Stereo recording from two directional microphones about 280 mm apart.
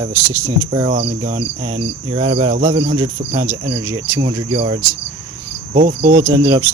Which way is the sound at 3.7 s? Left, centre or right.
Centre.